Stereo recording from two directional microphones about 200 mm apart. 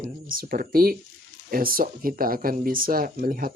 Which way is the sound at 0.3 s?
45° right (ahead or behind).